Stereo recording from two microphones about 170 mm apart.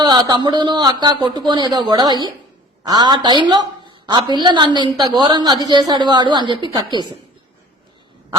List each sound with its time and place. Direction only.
0.0 s a woman's voice: 25° right (ahead or behind)